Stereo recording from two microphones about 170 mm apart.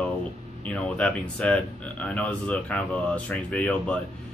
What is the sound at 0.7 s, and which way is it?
Speech, 5° left (ahead or behind).